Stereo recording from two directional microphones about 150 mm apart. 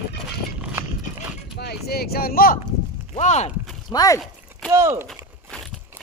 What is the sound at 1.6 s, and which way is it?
Speech, 90° left.